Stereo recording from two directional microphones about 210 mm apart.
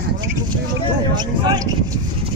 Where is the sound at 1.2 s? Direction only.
20° right (ahead or behind).